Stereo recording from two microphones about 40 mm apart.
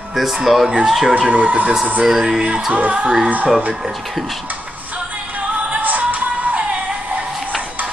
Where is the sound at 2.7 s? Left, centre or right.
Right.